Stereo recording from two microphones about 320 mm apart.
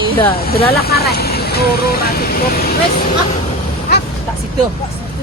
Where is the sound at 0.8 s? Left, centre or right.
Left.